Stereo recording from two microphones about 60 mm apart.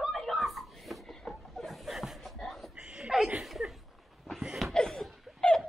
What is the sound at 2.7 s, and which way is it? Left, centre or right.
Chuckle, centre.